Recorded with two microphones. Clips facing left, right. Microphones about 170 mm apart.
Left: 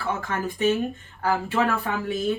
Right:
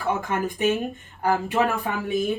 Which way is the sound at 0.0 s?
15° right (ahead or behind).